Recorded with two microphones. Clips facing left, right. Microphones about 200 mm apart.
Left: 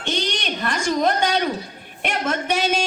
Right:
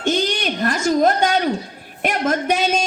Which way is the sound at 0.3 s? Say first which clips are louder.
Right 4 dB; 50° right (ahead or behind).